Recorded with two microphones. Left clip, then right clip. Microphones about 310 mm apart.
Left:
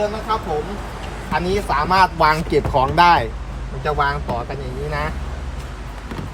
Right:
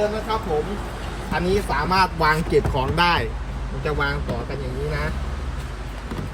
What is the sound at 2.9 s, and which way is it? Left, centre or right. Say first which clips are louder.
Speech: left 6 dB; left.